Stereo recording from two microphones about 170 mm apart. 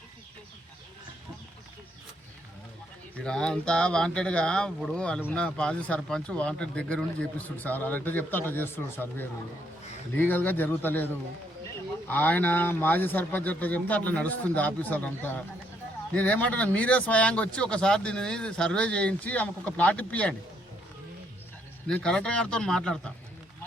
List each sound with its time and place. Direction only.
3.2 s speech: 5° left (ahead or behind)
21.8 s speech: 5° left (ahead or behind)